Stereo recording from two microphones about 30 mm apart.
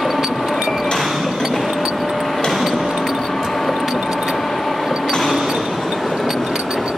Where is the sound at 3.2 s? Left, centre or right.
Centre.